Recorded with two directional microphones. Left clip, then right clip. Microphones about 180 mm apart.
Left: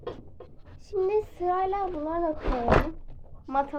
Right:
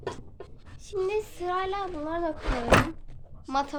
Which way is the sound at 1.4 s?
10° left (ahead or behind).